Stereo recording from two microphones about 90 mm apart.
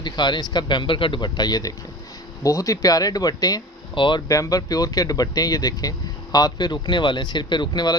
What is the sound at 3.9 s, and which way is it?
Speech, 65° left (ahead or behind).